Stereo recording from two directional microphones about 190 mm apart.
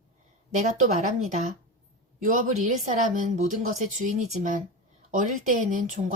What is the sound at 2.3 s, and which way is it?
Speech, 40° right (ahead or behind).